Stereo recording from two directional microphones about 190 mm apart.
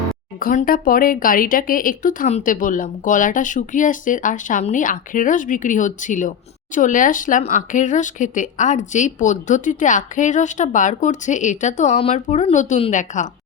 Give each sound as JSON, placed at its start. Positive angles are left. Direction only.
{"t": 0.3, "sound": "speech", "side_deg": 50}